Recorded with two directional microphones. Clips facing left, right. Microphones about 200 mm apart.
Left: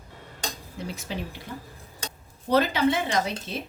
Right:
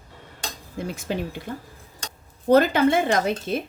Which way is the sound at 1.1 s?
55° right (ahead or behind).